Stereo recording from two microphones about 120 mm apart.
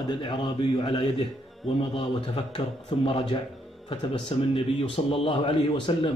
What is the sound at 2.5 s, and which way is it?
A man's voice, 50° left (ahead or behind).